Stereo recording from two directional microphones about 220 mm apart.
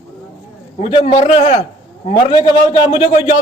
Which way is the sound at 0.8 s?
30° left (ahead or behind).